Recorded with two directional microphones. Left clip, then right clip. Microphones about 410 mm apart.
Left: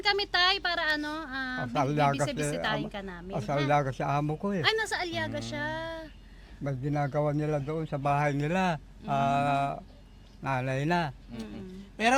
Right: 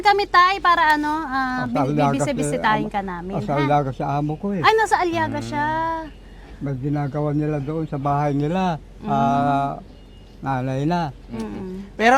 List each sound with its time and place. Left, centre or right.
0.0 s a woman's voice: centre
1.8 s a man's voice: left
2.2 s a woman's voice: centre
3.3 s a man's voice: left
4.6 s a woman's voice: centre
6.7 s a man's voice: left